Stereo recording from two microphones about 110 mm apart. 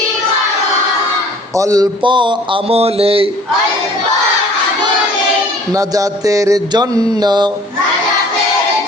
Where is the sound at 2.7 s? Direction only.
65° right (ahead or behind).